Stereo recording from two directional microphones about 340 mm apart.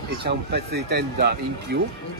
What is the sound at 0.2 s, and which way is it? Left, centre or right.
Speech, right.